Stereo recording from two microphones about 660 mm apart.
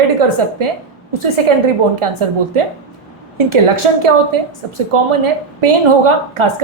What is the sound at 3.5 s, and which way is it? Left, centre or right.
A woman's voice, right.